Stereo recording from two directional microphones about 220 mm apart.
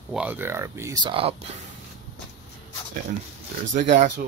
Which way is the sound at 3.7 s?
35° right (ahead or behind).